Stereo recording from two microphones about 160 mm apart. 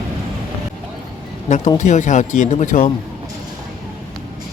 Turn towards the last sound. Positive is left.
turn(degrees=55)  # may be behind; listen again after turning